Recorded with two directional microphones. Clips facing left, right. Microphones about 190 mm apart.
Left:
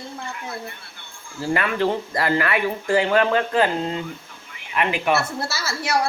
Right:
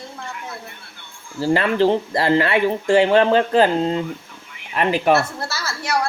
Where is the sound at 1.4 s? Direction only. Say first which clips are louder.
Right 5 dB; 30° right (ahead or behind).